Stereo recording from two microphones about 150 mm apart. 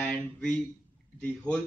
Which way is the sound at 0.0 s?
10° left (ahead or behind).